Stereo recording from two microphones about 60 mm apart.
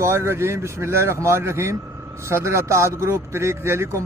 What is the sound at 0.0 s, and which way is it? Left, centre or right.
Speech, right.